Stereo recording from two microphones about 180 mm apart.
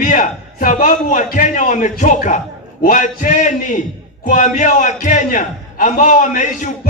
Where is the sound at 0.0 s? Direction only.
45° left (ahead or behind).